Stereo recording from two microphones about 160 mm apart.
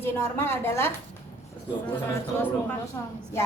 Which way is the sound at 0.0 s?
15° left (ahead or behind).